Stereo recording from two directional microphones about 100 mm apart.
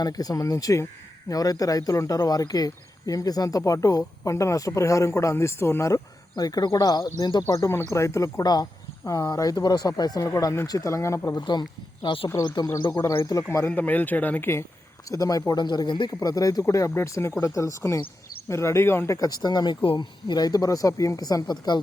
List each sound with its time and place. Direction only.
0.0 s speech: 40° left (ahead or behind)
7.5 s speech: 30° left (ahead or behind)
11.3 s speech: 45° left (ahead or behind)
12.0 s speech: 60° left (ahead or behind)
13.2 s speech: 30° left (ahead or behind)
13.7 s speech: 15° left (ahead or behind)
15.1 s speech: 35° left (ahead or behind)
16.2 s speech: 35° left (ahead or behind)
19.8 s speech: 55° left (ahead or behind)